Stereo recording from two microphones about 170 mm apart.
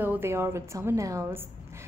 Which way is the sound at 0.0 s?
10° right (ahead or behind).